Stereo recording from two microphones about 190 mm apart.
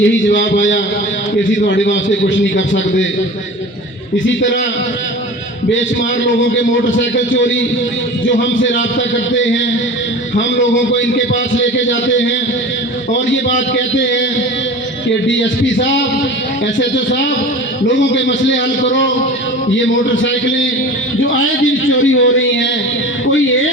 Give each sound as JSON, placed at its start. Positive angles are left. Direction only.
{"t": 0.0, "sound": "a man's voice", "side_deg": 75}
{"t": 4.3, "sound": "a man's voice", "side_deg": 75}
{"t": 5.7, "sound": "a man's voice", "side_deg": 75}
{"t": 13.3, "sound": "a man's voice", "side_deg": 75}
{"t": 15.3, "sound": "a man's voice", "side_deg": 75}
{"t": 21.8, "sound": "a man's voice", "side_deg": 90}